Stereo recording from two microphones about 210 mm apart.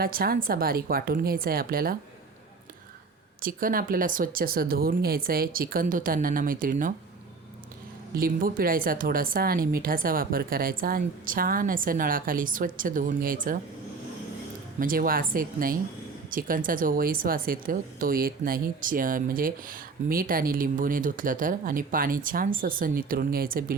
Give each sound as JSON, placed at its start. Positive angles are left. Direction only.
{"t": 0.0, "sound": "speech", "side_deg": -45}
{"t": 3.4, "sound": "speech", "side_deg": -40}
{"t": 8.1, "sound": "speech", "side_deg": -45}
{"t": 14.8, "sound": "speech", "side_deg": -40}